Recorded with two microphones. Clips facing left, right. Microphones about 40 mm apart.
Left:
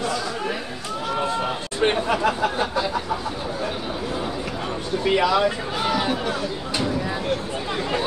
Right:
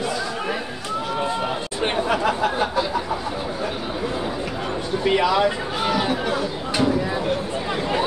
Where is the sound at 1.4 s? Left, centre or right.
Centre.